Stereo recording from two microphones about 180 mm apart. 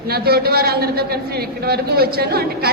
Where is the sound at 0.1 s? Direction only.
60° right (ahead or behind).